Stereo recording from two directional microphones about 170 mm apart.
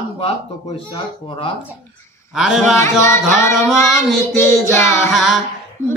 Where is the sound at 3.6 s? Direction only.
Centre (ahead or behind).